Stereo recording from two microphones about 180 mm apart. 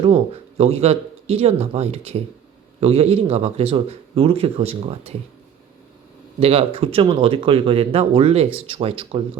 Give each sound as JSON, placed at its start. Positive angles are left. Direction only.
{"t": 0.0, "sound": "speech", "side_deg": -35}
{"t": 6.4, "sound": "speech", "side_deg": -30}